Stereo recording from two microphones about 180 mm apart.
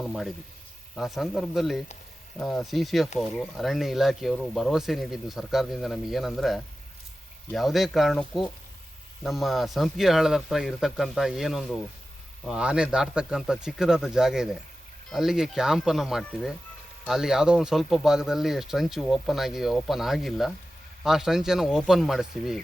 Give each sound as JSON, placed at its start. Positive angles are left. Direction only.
{"t": 0.0, "sound": "speech", "side_deg": 0}